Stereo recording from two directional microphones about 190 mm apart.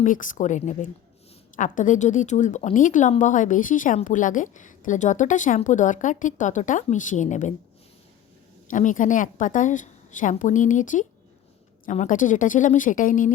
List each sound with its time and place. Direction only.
0.0 s a woman's voice: 45° left (ahead or behind)
8.7 s a woman's voice: 40° left (ahead or behind)